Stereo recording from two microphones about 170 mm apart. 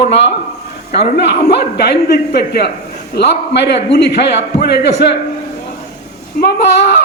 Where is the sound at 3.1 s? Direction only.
85° left.